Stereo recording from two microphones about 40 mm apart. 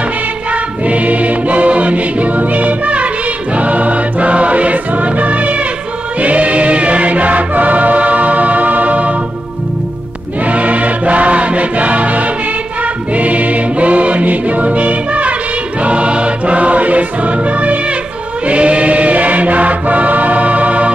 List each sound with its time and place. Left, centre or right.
0.8 s music: right
6.2 s choir: right
10.4 s music: right